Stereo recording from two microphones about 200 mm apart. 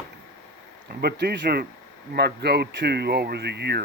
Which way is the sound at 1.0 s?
55° right (ahead or behind).